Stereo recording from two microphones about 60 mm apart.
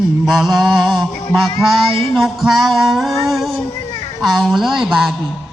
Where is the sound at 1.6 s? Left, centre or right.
Left.